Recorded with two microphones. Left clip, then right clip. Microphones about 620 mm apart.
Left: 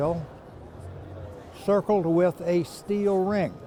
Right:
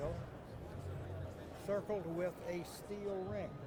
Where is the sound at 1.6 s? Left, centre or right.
Left.